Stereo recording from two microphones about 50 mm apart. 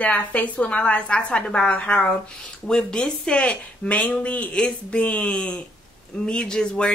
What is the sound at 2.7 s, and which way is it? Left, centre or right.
Speech, centre.